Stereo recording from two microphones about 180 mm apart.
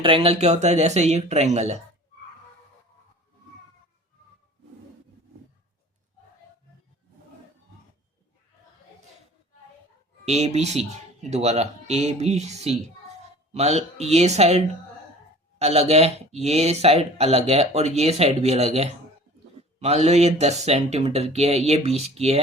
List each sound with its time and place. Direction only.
0.0 s speech: 30° right (ahead or behind)
10.2 s speech: 40° right (ahead or behind)